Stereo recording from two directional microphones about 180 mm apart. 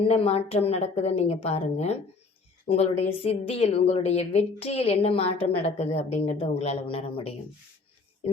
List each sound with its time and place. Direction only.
0.0 s a woman's voice: 35° left (ahead or behind)